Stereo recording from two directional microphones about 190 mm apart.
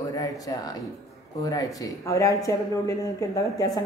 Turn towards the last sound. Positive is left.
turn(degrees=20)  # may be behind; listen again after turning